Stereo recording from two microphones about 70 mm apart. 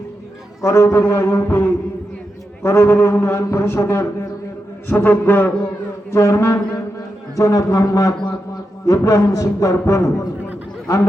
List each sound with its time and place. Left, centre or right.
0.6 s a man's voice: left
4.9 s a man's voice: left
6.1 s speech: left